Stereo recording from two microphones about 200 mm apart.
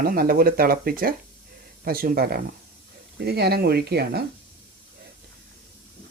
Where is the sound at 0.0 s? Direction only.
50° right (ahead or behind).